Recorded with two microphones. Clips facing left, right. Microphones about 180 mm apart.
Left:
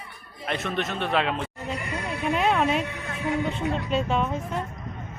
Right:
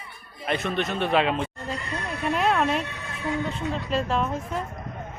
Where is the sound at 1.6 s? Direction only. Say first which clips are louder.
Left 1 dB; 10° left (ahead or behind).